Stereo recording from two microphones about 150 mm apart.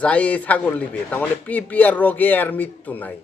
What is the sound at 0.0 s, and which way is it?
Speech, 10° left (ahead or behind).